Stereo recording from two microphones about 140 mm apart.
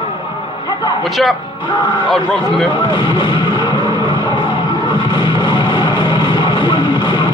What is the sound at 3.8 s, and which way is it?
Music, 30° right (ahead or behind).